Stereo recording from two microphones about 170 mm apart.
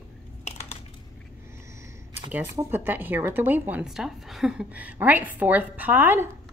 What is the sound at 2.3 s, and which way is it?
Speech, 10° right (ahead or behind).